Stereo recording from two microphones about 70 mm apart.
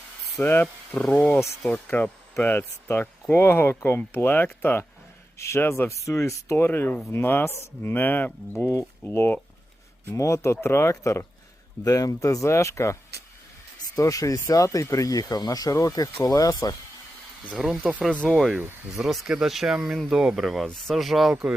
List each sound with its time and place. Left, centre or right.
0.3 s speech: left
6.6 s speech: left
8.5 s speech: left
9.0 s speech: left
10.1 s speech: left
11.9 s speech: left
13.9 s speech: left
17.6 s speech: centre
18.2 s speech: centre
18.9 s speech: centre